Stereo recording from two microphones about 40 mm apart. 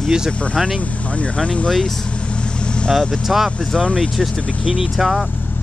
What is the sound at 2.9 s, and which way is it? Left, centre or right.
Speech, centre.